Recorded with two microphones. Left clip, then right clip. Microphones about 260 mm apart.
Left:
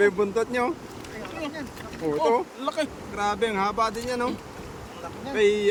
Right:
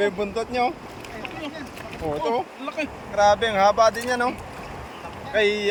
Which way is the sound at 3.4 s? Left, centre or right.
Centre.